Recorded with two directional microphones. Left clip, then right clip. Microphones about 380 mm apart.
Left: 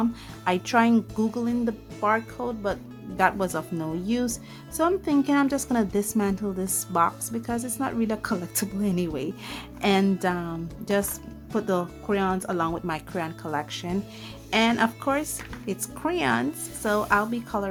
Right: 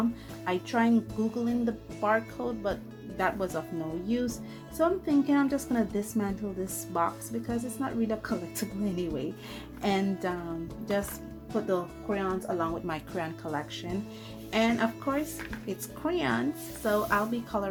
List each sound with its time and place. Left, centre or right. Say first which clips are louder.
0.4 s a woman's voice: left 6 dB; centre